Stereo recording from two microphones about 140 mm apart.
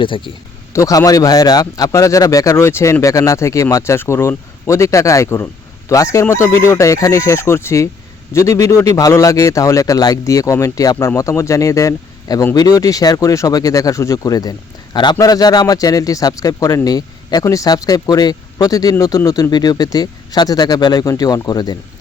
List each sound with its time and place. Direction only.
0.7 s a man's voice: 25° left (ahead or behind)